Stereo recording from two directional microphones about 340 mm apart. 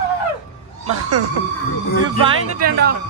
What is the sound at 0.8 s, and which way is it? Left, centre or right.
Speech, right.